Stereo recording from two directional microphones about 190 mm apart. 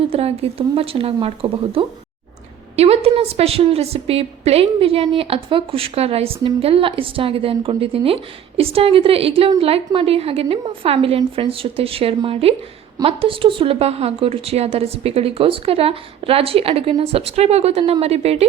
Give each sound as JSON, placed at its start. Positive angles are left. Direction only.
{"t": 0.1, "sound": "a woman's voice", "side_deg": -30}